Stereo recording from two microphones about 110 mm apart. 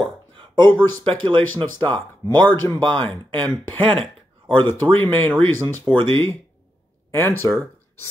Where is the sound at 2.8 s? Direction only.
50° right (ahead or behind).